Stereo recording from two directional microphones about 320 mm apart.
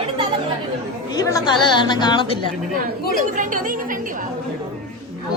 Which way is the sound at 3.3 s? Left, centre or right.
Right.